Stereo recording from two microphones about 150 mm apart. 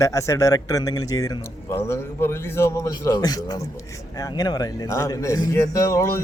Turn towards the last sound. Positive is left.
turn(degrees=20)  # may be behind; listen again after turning